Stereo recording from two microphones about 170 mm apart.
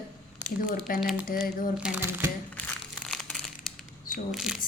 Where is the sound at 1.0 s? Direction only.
Centre (ahead or behind).